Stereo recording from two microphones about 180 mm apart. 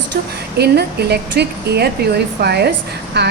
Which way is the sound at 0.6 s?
65° right (ahead or behind).